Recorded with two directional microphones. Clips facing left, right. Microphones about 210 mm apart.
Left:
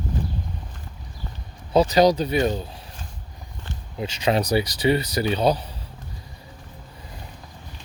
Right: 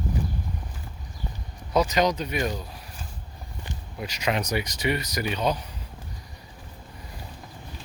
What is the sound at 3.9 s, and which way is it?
Speech, 25° left (ahead or behind).